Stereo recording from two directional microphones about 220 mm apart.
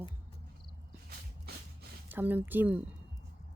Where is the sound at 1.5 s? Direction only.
45° right (ahead or behind).